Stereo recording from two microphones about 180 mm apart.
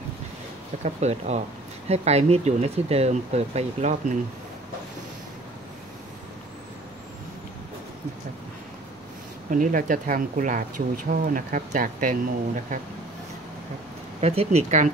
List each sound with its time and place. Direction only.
0.8 s speech: 40° right (ahead or behind)
9.5 s speech: 50° right (ahead or behind)
14.2 s speech: 35° right (ahead or behind)